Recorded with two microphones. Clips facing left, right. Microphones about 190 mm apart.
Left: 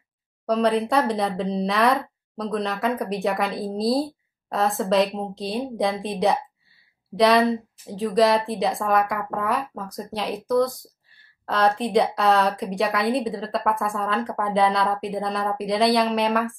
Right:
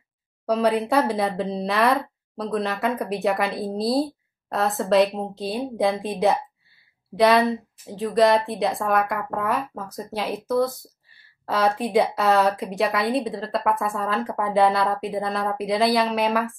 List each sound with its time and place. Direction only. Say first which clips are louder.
0.5 s speech: even; 5° right (ahead or behind)